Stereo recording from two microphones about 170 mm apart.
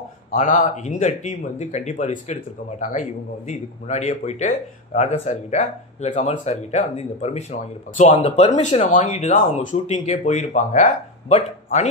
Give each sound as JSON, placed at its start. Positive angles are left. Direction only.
{"t": 0.3, "sound": "speech", "side_deg": 50}